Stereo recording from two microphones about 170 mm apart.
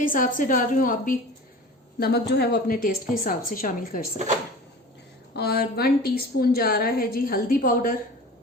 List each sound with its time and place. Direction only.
0.0 s a woman's voice: 55° left (ahead or behind)
2.0 s a woman's voice: 70° left (ahead or behind); by 4.0 s 55° left (ahead or behind)
5.3 s a woman's voice: 70° left (ahead or behind)